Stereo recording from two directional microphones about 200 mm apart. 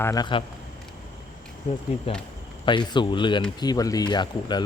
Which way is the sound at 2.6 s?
25° left (ahead or behind).